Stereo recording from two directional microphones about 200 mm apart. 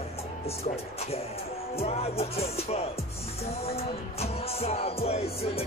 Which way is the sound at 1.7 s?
30° left (ahead or behind).